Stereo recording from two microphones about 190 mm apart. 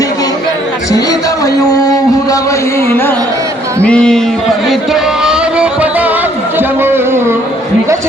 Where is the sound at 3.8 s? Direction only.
5° left (ahead or behind).